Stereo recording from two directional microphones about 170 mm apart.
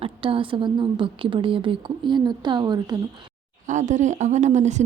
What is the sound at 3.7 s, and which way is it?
A woman's voice, 45° right (ahead or behind).